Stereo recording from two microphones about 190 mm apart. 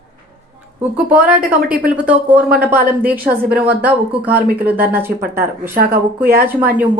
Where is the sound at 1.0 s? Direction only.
10° right (ahead or behind).